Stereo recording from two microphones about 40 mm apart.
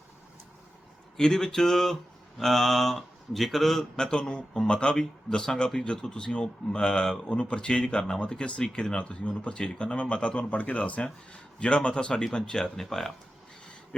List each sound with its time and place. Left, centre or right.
1.1 s speech: centre
3.9 s speech: left